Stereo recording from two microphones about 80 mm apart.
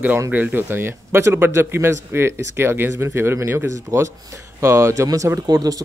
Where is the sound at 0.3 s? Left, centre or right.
Right.